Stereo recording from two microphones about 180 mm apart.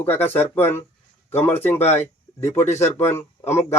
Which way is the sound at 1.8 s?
35° left (ahead or behind).